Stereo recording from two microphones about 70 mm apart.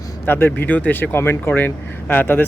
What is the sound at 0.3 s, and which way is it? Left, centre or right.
Speech, left.